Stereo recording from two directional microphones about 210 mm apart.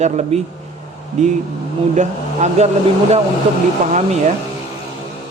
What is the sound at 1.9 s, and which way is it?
Mantra, 35° right (ahead or behind).